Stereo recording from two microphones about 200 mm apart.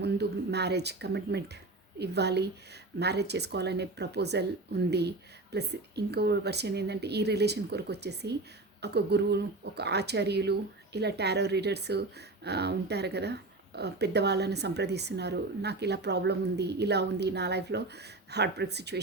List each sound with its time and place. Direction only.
0.0 s speech: 55° right (ahead or behind)